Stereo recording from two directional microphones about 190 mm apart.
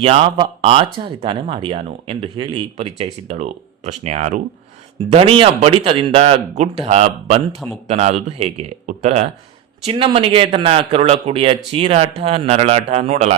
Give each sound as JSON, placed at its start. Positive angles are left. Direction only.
{"t": 0.0, "sound": "a man's voice", "side_deg": -30}
{"t": 5.1, "sound": "a man's voice", "side_deg": -30}